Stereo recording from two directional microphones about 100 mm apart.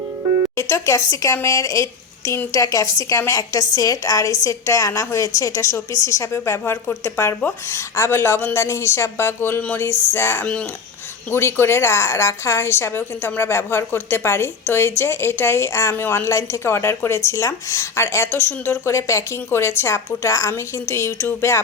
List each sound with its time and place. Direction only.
0.5 s a woman's voice: 30° left (ahead or behind)